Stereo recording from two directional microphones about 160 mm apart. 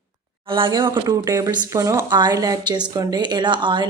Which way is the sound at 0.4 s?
30° right (ahead or behind).